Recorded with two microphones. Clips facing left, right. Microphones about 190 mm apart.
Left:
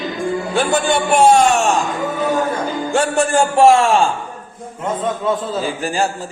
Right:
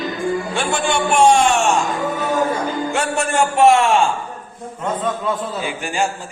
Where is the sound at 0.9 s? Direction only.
40° left (ahead or behind).